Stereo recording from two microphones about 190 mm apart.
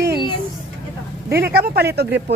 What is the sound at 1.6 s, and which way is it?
Speech, 55° right (ahead or behind).